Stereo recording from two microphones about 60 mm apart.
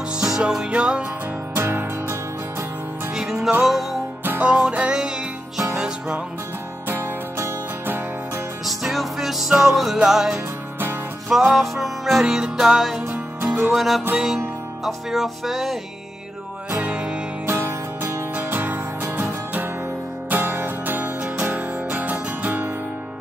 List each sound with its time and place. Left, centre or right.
0.2 s music: centre
1.5 s music: right
3.2 s music: centre
4.4 s music: centre
6.9 s music: right
8.6 s music: centre
13.1 s music: right
13.7 s music: centre
16.7 s music: centre
17.5 s music: right
18.3 s music: right